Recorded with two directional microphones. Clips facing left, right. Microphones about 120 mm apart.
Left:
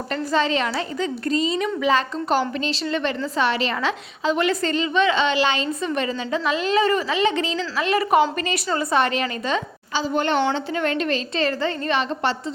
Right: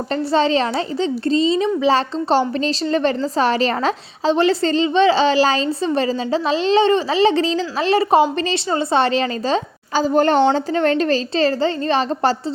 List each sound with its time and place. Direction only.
0.1 s a woman's voice: 30° right (ahead or behind)
9.9 s a woman's voice: 40° right (ahead or behind)